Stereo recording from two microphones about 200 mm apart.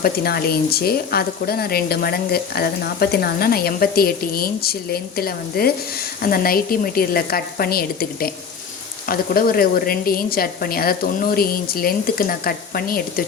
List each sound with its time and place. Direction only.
0.0 s speech: 50° left (ahead or behind)